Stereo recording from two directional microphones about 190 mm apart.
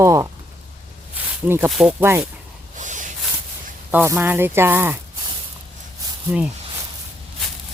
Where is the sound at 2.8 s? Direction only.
40° right (ahead or behind).